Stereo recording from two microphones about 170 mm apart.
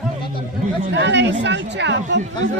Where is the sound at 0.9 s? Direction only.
90° right.